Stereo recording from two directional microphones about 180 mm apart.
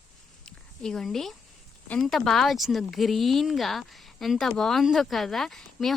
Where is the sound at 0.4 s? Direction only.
5° left (ahead or behind).